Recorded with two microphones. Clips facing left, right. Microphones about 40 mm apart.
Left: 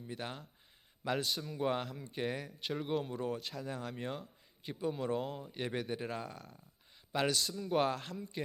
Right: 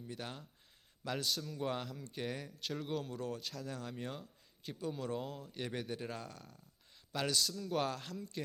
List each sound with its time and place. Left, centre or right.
0.1 s a man's voice: centre